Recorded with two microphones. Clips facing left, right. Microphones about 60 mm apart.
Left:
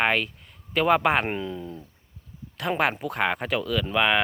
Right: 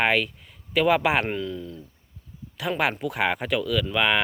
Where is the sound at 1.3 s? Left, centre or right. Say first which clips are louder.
Right 1 dB; left.